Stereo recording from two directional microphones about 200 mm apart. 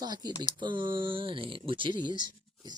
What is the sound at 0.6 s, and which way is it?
Speech, 25° right (ahead or behind).